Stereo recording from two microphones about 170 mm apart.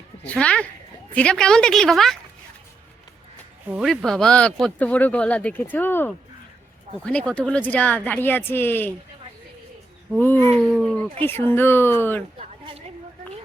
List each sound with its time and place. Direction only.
0.3 s a woman's voice: 5° left (ahead or behind)
3.7 s a woman's voice: centre (ahead or behind)
10.5 s speech: 5° left (ahead or behind)